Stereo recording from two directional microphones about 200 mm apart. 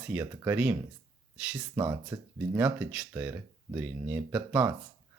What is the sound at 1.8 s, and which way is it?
Speech, 15° right (ahead or behind).